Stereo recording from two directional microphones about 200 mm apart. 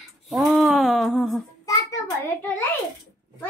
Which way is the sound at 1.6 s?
15° left (ahead or behind).